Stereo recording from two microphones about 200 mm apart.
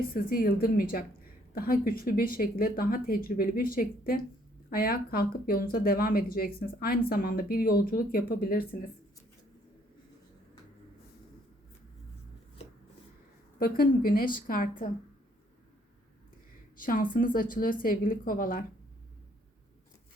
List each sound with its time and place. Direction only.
0.1 s speech: 45° left (ahead or behind)
13.6 s speech: 45° left (ahead or behind)
16.8 s speech: 45° left (ahead or behind)